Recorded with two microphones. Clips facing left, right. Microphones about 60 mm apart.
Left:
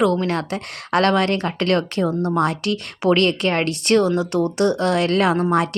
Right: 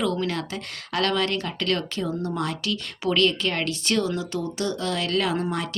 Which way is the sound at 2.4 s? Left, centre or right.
Left.